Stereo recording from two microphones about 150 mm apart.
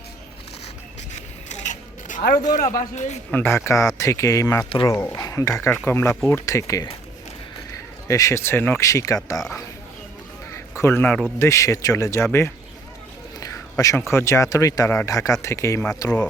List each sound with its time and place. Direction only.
1.1 s a sound: 55° left (ahead or behind)
2.9 s speech: 50° left (ahead or behind)
3.3 s speech: 15° left (ahead or behind)
10.5 s honk: 20° left (ahead or behind)
11.3 s speech: 20° left (ahead or behind)
13.4 s a sound: 25° left (ahead or behind)
14.1 s speech: 20° left (ahead or behind)